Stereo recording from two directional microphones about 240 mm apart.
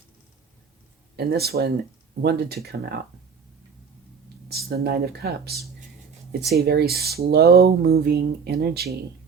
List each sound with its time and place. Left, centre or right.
1.1 s speech: right
4.4 s speech: right